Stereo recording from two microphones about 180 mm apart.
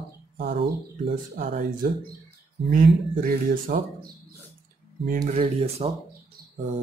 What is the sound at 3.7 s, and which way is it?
Speech, 55° right (ahead or behind).